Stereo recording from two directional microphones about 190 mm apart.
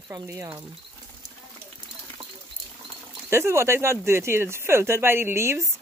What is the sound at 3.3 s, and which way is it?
A woman's voice, 15° right (ahead or behind).